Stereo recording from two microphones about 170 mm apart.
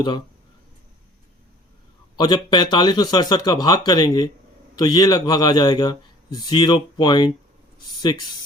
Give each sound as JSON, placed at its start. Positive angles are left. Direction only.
{"t": 2.1, "sound": "speech", "side_deg": 25}